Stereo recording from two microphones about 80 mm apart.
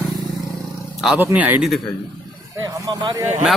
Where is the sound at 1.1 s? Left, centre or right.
Right.